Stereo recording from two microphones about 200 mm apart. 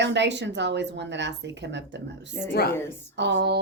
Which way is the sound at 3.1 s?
60° right (ahead or behind).